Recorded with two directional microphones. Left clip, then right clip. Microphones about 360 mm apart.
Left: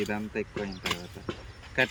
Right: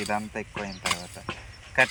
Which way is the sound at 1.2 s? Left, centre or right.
Centre.